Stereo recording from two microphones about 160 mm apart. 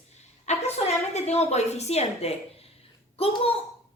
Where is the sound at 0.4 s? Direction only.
40° left (ahead or behind).